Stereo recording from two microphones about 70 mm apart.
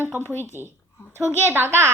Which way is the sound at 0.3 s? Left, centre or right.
Left.